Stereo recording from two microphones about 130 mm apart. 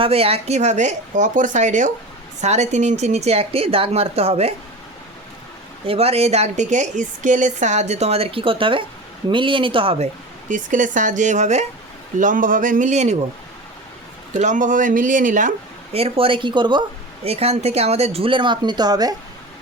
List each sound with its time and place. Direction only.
0.0 s a woman's voice: 50° right (ahead or behind); by 1.9 s 70° right (ahead or behind)
2.4 s speech: 60° right (ahead or behind)
5.8 s a woman's voice: 45° right (ahead or behind)
10.5 s speech: 75° right (ahead or behind)
12.2 s speech: 90° right; by 13.1 s 65° right (ahead or behind)
14.3 s speech: 70° right (ahead or behind)
15.9 s speech: 50° right (ahead or behind)
17.2 s speech: 55° right (ahead or behind); by 19.1 s 30° right (ahead or behind)